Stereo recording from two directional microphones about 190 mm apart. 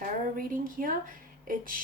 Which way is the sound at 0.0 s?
45° right (ahead or behind).